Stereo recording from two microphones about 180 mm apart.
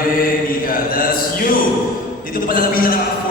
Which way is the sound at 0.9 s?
50° left (ahead or behind).